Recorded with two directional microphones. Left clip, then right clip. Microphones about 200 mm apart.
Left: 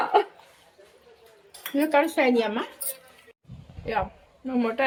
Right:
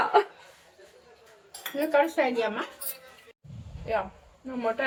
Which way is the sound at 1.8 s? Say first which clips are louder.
Left 2 dB; 50° left (ahead or behind).